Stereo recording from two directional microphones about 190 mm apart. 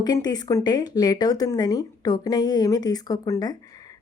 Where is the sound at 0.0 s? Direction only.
20° left (ahead or behind).